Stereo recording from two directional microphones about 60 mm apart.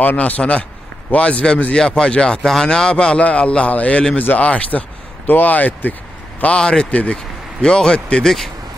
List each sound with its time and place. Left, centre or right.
0.0 s a man's voice: left
6.4 s speech: centre
6.9 s a man's voice: left; by 8.5 s centre